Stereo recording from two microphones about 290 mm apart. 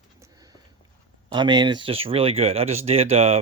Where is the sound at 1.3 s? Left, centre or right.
Centre.